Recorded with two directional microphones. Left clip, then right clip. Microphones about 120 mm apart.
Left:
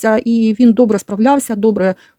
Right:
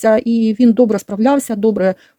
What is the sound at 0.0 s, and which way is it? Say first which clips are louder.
Speech: even; 25° left (ahead or behind).